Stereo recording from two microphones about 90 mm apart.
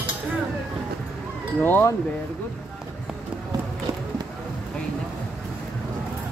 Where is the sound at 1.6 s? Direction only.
20° left (ahead or behind).